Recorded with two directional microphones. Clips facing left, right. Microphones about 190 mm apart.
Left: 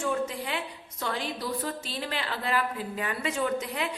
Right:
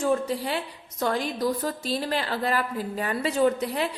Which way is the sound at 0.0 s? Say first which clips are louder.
Right 5 dB; 35° right (ahead or behind).